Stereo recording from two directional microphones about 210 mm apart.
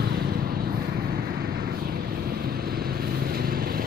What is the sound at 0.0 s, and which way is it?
Vehicle, 45° right (ahead or behind).